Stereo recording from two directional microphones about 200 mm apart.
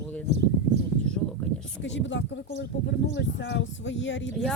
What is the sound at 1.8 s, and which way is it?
Speech, 65° left (ahead or behind).